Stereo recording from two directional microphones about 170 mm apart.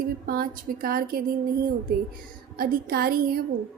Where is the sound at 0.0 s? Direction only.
55° right (ahead or behind).